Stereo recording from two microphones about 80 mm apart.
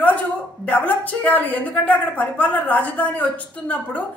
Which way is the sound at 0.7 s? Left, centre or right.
Centre.